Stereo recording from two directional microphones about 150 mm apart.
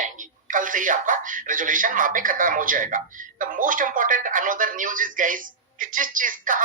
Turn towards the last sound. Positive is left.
turn(degrees=-65)  # may be behind; listen again after turning